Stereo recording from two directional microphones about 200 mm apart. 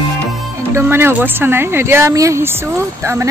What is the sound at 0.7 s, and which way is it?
Speech, 10° right (ahead or behind).